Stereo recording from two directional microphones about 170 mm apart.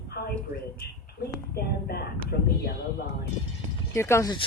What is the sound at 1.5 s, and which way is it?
Speech, 65° left (ahead or behind).